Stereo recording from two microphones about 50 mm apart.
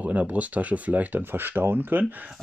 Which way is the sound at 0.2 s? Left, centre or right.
Right.